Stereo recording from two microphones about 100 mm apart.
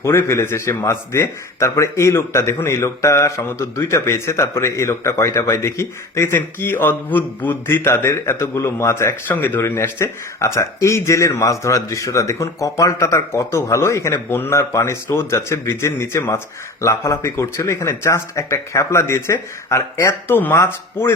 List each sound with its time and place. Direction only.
0.0 s speech: 30° left (ahead or behind)